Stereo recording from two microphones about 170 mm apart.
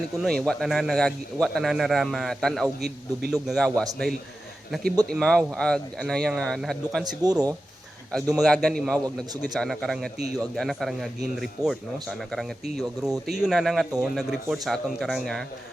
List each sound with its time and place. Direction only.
0.2 s a man's voice: 5° left (ahead or behind)
7.3 s speech: 20° right (ahead or behind)
8.1 s a man's voice: centre (ahead or behind)